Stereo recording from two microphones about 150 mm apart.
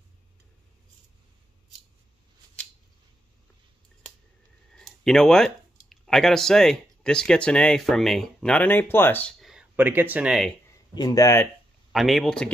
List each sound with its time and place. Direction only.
4.7 s speech: 5° left (ahead or behind)
9.4 s speech: 5° right (ahead or behind)
11.0 s speech: 25° left (ahead or behind)
11.9 s speech: centre (ahead or behind)